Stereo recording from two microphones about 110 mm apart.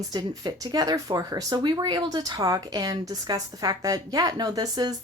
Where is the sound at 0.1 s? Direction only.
35° right (ahead or behind).